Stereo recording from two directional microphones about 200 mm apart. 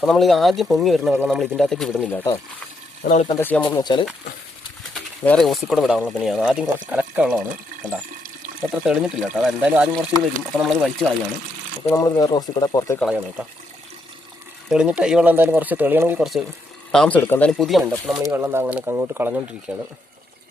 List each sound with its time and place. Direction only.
0.0 s speech: centre (ahead or behind)
3.0 s speech: 40° left (ahead or behind)
3.2 s speech: 10° left (ahead or behind)
5.2 s speech: 5° left (ahead or behind)
8.7 s speech: 5° right (ahead or behind)
11.9 s speech: 15° left (ahead or behind)
13.0 s speech: 5° right (ahead or behind)
14.7 s speech: 5° right (ahead or behind)